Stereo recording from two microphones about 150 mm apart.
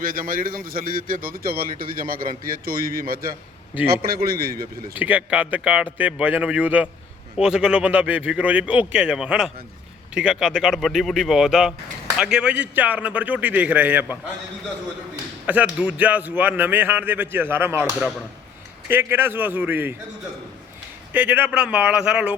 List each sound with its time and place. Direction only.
0.0 s a man's voice: 70° right (ahead or behind)
3.8 s a man's voice: 90° right
4.9 s speech: 10° right (ahead or behind)
15.4 s speech: 10° right (ahead or behind)
18.9 s speech: 15° right (ahead or behind)
21.1 s speech: 10° right (ahead or behind)